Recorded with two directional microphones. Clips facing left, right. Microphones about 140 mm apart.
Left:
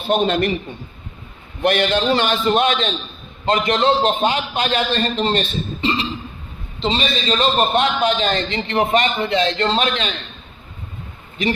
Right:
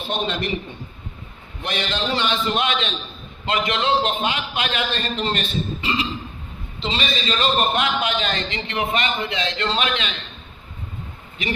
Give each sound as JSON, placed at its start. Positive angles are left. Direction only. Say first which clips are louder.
{"t": 0.1, "sound": "a man's voice", "louder": "left 8 dB", "side_deg": 50}
{"t": 1.6, "sound": "a man's voice", "louder": "left 9 dB", "side_deg": 55}
{"t": 11.4, "sound": "a man's voice", "louder": "left 6 dB", "side_deg": 40}